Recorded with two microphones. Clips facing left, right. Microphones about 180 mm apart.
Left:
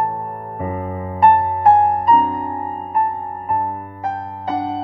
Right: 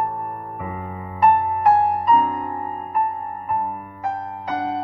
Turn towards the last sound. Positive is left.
turn(degrees=30)  # may be behind; listen again after turning